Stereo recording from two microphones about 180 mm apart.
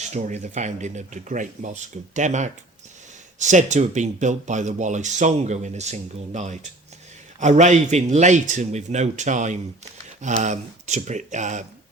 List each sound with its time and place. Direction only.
0.0 s speech: 40° right (ahead or behind)